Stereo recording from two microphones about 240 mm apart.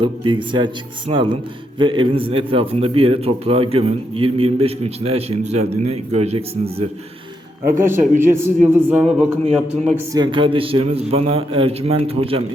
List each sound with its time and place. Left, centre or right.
0.0 s a man's voice: centre
7.6 s a man's voice: centre
10.1 s a man's voice: centre